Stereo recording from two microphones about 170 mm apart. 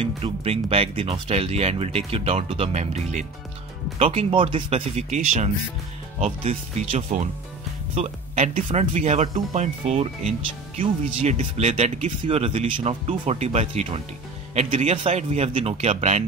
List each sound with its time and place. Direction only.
0.0 s speech: 35° right (ahead or behind)